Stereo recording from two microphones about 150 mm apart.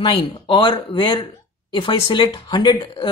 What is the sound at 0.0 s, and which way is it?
Speech, 35° left (ahead or behind).